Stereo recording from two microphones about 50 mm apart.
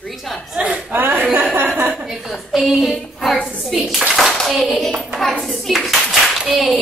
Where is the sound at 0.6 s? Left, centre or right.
Right.